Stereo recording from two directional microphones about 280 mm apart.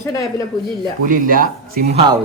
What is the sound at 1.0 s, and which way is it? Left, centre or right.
Speech, right.